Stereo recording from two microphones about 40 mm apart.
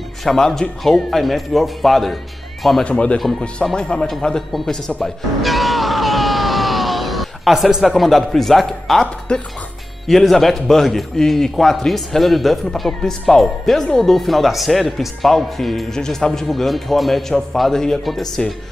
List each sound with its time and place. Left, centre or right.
0.2 s speech: centre
2.8 s a man's voice: left; by 4.5 s centre
5.0 s music: centre
7.9 s speech: centre
9.3 s speech: left
10.0 s a man's voice: centre